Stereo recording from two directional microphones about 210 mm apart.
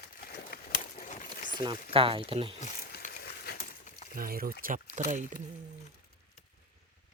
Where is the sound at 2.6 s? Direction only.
40° left (ahead or behind).